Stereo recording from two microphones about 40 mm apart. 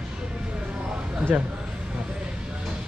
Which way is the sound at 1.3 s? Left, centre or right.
Right.